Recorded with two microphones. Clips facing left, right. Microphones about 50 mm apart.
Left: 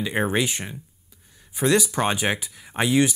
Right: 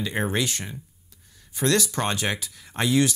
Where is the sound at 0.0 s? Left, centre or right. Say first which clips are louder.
Left 3 dB; centre.